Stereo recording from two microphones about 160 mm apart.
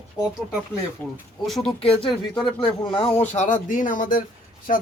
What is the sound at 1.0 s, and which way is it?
Speech, 10° left (ahead or behind).